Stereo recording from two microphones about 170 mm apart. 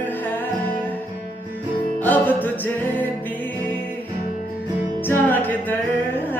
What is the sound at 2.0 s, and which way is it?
Music, 10° left (ahead or behind).